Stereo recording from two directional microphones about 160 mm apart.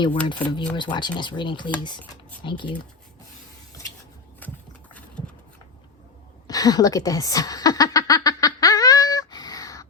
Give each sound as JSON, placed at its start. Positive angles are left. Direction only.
{"t": 0.3, "sound": "speech", "side_deg": 30}
{"t": 4.4, "sound": "a sound", "side_deg": 10}
{"t": 6.5, "sound": "snicker", "side_deg": 25}